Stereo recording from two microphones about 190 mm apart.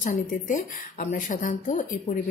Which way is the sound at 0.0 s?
45° left (ahead or behind).